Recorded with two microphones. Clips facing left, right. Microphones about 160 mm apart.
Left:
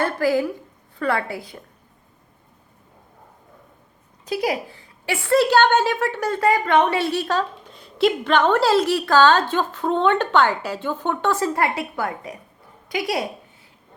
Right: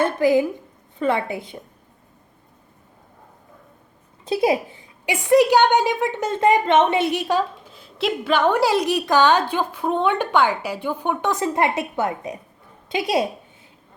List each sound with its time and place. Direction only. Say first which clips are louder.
0.0 s a woman's voice: right 3 dB; 20° right (ahead or behind)
4.3 s a woman's voice: right 4 dB; 25° right (ahead or behind)
7.7 s a woman's voice: left 5 dB; centre (ahead or behind); by 13.2 s 25° right (ahead or behind)